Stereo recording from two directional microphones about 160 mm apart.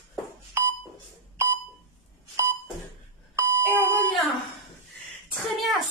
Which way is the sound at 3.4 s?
15° right (ahead or behind).